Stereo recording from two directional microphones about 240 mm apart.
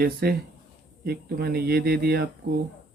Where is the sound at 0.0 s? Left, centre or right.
Right.